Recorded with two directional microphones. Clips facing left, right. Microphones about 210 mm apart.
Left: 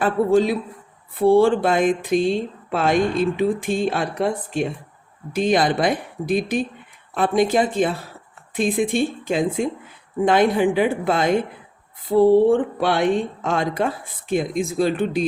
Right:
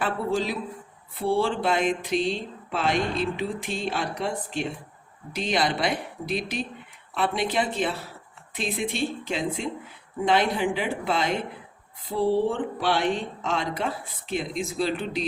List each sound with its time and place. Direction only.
0.0 s speech: 50° left (ahead or behind)